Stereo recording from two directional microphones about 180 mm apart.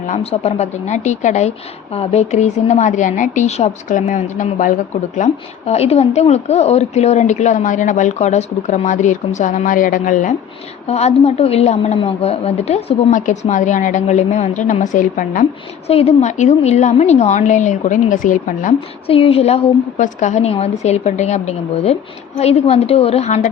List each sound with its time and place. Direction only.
0.1 s a woman's voice: 35° left (ahead or behind)
15.9 s a woman's voice: 35° left (ahead or behind)
19.0 s a woman's voice: 30° left (ahead or behind)